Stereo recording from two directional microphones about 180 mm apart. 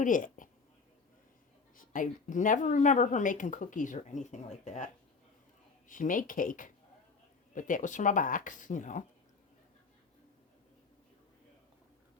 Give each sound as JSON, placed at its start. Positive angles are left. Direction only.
{"t": 0.0, "sound": "a sound", "side_deg": 45}
{"t": 1.7, "sound": "a woman's voice", "side_deg": 50}
{"t": 5.9, "sound": "a woman's voice", "side_deg": 50}